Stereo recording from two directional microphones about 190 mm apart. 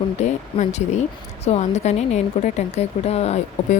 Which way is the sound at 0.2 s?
35° left (ahead or behind).